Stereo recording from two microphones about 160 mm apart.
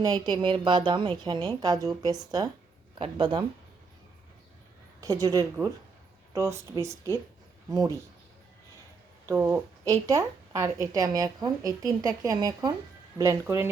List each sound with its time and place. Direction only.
0.0 s a woman's voice: 25° right (ahead or behind)
4.9 s a woman's voice: 20° right (ahead or behind)
7.7 s a woman's voice: 20° right (ahead or behind)
9.2 s a woman's voice: 15° right (ahead or behind)